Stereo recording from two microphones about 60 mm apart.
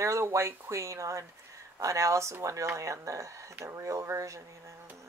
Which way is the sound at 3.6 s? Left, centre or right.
Right.